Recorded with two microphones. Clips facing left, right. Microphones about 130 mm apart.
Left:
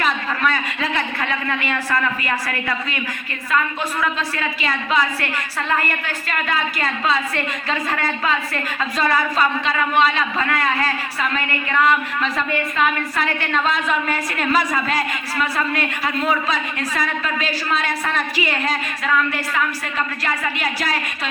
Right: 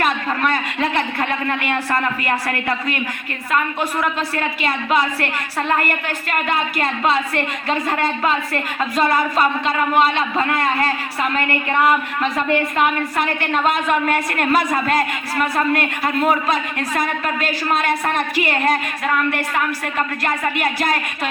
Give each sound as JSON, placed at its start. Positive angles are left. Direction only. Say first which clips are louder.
{"t": 0.0, "sound": "a sound", "louder": "right 2 dB", "side_deg": -55}
{"t": 0.9, "sound": "a woman's voice", "louder": "right 3 dB", "side_deg": -25}
{"t": 4.4, "sound": "a woman's voice", "louder": "right 2 dB", "side_deg": -50}
{"t": 6.2, "sound": "a woman's voice", "louder": "right 2 dB", "side_deg": -55}
{"t": 7.7, "sound": "a woman's voice", "louder": "right 4 dB", "side_deg": -20}
{"t": 13.7, "sound": "a woman's voice", "louder": "right 5 dB", "side_deg": -55}